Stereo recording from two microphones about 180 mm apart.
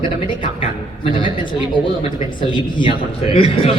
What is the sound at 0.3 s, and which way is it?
A man's voice, 25° left (ahead or behind).